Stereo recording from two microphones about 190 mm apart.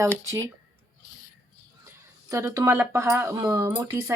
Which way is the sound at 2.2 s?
15° right (ahead or behind).